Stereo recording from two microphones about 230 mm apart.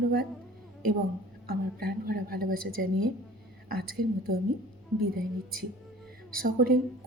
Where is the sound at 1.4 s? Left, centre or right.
Right.